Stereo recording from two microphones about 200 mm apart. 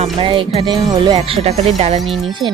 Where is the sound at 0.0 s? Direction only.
25° right (ahead or behind).